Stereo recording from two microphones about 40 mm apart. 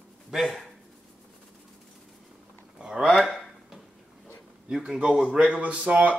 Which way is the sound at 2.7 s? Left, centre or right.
Right.